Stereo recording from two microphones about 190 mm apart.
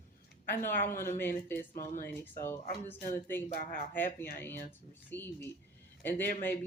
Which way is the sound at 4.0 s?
10° left (ahead or behind).